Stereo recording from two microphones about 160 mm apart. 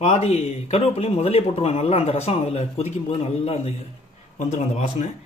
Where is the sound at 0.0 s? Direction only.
45° left (ahead or behind).